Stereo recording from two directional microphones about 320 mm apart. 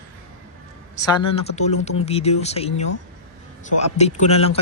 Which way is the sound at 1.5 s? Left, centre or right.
Left.